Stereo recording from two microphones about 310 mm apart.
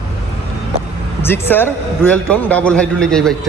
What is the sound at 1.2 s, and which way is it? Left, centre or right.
A man's voice, centre.